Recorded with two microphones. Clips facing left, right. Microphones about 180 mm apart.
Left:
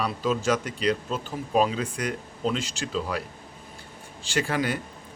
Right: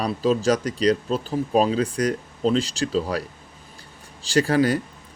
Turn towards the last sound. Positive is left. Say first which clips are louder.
# right 7 dB
turn(degrees=-40)  # may be behind; listen again after turning